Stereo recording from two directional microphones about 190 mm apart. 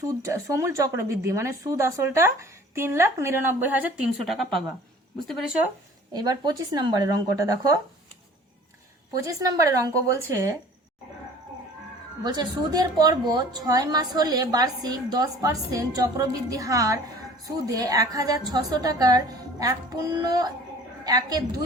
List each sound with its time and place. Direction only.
0.3 s a woman's voice: 15° right (ahead or behind)
6.1 s a woman's voice: 20° right (ahead or behind)
9.2 s a woman's voice: 20° right (ahead or behind)
12.2 s a woman's voice: 20° right (ahead or behind)